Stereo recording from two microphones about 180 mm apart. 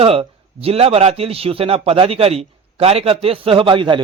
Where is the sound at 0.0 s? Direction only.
30° right (ahead or behind).